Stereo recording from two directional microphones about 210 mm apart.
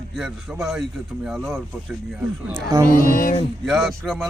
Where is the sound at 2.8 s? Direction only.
40° left (ahead or behind).